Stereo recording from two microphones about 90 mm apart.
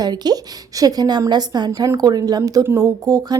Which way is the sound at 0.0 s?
50° right (ahead or behind).